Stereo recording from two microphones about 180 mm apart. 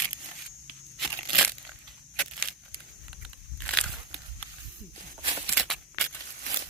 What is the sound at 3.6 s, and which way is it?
Crumpling, 5° left (ahead or behind).